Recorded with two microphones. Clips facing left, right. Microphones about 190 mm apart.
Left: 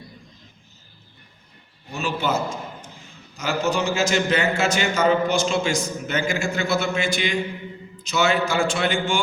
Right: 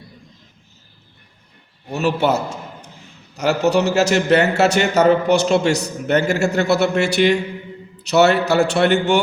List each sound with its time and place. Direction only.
1.9 s a man's voice: 65° right (ahead or behind)